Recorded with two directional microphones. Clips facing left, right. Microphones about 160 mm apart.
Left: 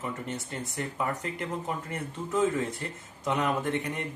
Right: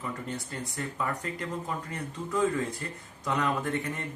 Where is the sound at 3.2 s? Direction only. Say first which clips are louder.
Left 1 dB; 20° left (ahead or behind).